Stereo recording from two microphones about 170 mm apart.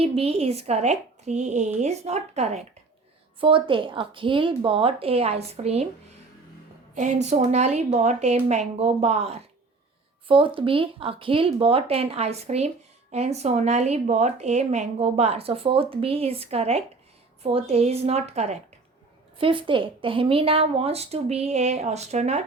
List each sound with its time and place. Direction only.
0.0 s speech: 35° right (ahead or behind)
6.9 s speech: 45° right (ahead or behind)